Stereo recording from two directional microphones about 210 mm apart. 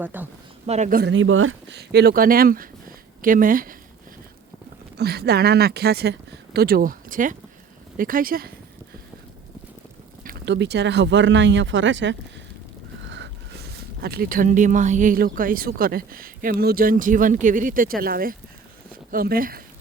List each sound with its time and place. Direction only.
0.0 s speech: 10° right (ahead or behind)
0.7 s speech: 35° right (ahead or behind); by 1.8 s 70° right (ahead or behind)
1.8 s speech: 50° right (ahead or behind)
4.9 s speech: 50° right (ahead or behind)
10.2 s speech: 55° right (ahead or behind)